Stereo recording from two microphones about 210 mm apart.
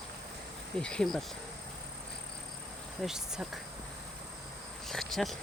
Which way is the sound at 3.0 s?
5° right (ahead or behind).